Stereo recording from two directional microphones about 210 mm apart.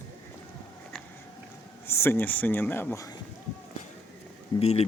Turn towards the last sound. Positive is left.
turn(degrees=30)  # may be behind; listen again after turning